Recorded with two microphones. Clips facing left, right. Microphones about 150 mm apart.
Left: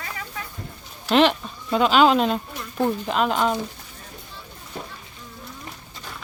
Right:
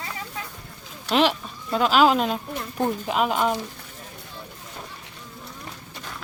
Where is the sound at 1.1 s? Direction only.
5° right (ahead or behind).